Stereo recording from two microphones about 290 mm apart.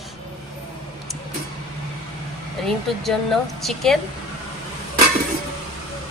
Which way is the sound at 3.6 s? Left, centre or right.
Centre.